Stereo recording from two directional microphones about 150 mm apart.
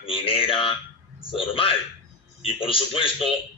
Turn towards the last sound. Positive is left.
turn(degrees=35)  # may be behind; listen again after turning